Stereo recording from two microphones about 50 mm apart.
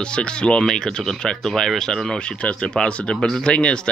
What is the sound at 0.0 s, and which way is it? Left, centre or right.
A man's voice, centre.